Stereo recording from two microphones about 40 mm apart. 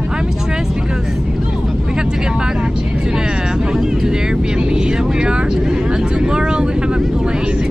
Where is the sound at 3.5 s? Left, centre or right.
Centre.